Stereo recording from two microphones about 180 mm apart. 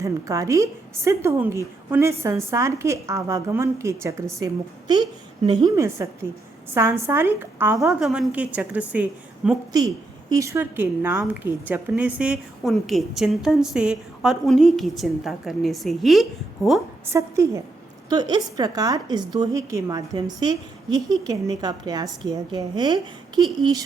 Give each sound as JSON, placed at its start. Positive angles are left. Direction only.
{"t": 0.0, "sound": "a woman's voice", "side_deg": -15}
{"t": 9.7, "sound": "a woman's voice", "side_deg": -20}
{"t": 17.1, "sound": "a woman's voice", "side_deg": -15}